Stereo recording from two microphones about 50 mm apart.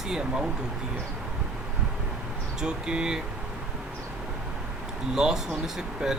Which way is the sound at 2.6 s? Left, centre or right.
Centre.